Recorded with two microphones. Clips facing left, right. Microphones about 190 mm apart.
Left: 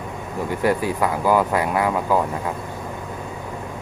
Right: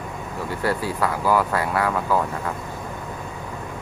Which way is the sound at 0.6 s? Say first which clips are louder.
Left 3 dB; 15° left (ahead or behind).